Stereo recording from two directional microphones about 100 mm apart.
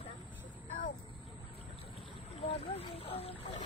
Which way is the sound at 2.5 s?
80° left.